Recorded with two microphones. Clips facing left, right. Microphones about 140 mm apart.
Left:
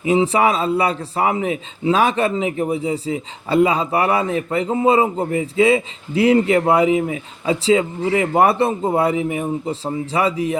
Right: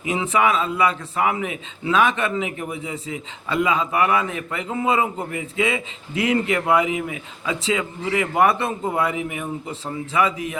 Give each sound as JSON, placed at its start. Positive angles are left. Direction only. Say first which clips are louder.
{"t": 0.0, "sound": "a man's voice", "louder": "left 5 dB", "side_deg": 30}